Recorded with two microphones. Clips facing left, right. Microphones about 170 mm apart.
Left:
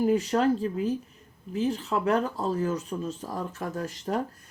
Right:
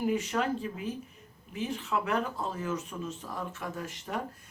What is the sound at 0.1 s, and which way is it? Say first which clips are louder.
Speech: left 6 dB; 35° left (ahead or behind).